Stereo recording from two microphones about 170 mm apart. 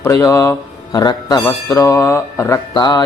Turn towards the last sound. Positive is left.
turn(degrees=25)  # may be behind; listen again after turning